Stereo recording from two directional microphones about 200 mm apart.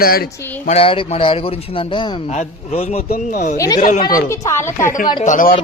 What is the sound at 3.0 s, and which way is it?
Speech, 50° left (ahead or behind).